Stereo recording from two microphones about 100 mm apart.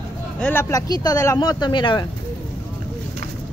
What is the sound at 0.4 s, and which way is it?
Speech, 20° left (ahead or behind).